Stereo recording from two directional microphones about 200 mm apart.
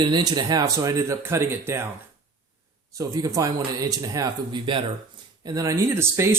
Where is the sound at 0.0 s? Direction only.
20° right (ahead or behind).